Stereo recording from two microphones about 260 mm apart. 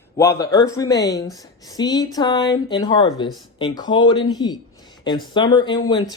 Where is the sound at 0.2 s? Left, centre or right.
Centre.